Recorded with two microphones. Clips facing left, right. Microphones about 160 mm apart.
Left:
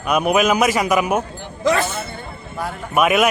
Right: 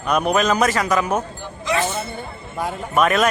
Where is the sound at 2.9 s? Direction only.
10° left (ahead or behind).